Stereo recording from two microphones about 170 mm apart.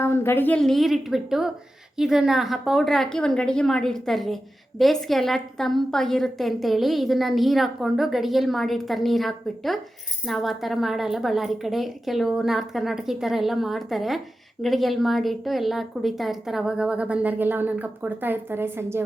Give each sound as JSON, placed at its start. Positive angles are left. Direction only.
{"t": 0.0, "sound": "a woman's voice", "side_deg": 15}